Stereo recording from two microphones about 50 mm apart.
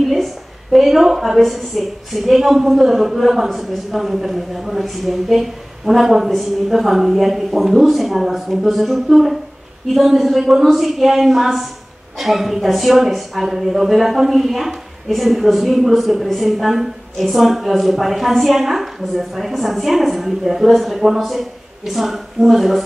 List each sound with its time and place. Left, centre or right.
0.0 s speech: centre